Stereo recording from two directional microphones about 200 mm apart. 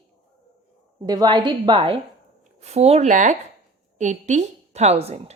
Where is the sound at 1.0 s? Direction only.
20° right (ahead or behind).